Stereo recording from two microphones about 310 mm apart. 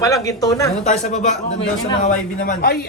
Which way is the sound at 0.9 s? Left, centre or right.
Left.